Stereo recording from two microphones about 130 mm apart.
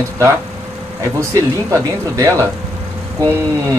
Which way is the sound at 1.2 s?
25° right (ahead or behind).